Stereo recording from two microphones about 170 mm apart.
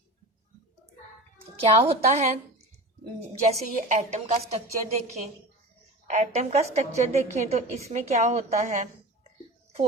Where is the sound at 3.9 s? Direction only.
45° right (ahead or behind).